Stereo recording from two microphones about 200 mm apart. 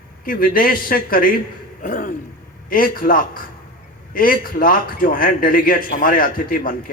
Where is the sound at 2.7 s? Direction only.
45° left (ahead or behind).